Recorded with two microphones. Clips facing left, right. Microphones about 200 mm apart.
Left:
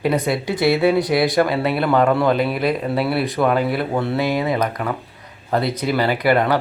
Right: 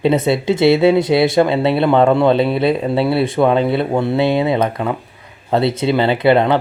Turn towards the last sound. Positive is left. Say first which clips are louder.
# right 4 dB
turn(degrees=-25)  # may be behind; listen again after turning